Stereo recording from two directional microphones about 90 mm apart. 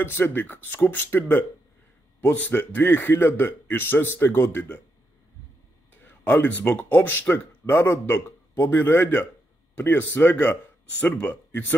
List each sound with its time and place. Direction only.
0.0 s speech: 25° left (ahead or behind)
6.0 s speech: 20° left (ahead or behind)